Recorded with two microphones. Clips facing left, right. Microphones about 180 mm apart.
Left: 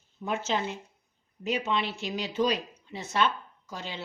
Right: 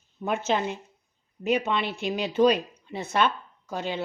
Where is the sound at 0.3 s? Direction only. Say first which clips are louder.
Right 4 dB; 60° right (ahead or behind).